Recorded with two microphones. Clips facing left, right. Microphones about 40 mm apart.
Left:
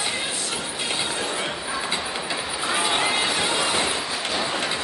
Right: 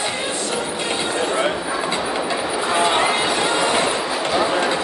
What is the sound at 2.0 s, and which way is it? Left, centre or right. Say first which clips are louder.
Train: right 7 dB; right.